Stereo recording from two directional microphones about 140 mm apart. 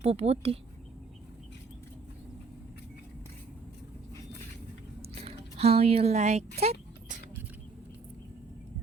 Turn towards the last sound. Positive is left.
turn(degrees=-50)  # may be behind; listen again after turning